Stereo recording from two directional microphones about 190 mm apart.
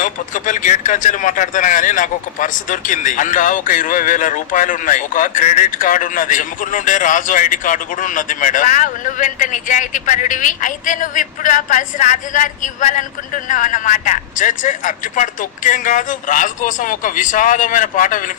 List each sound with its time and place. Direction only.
0.0 s speech: 45° left (ahead or behind)